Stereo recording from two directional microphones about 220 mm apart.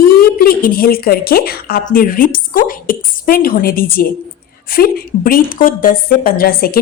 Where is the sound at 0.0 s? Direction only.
45° left (ahead or behind).